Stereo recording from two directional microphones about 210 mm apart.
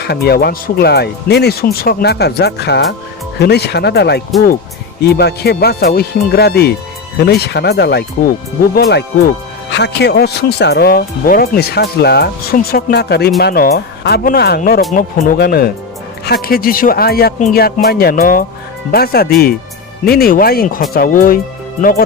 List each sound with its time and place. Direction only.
0.0 s speech: 50° left (ahead or behind)